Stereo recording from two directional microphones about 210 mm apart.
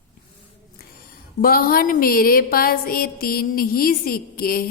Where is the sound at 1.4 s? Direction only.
45° left (ahead or behind).